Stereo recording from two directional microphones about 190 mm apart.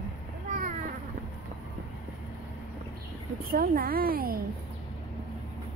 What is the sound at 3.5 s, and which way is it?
Speech, 50° right (ahead or behind).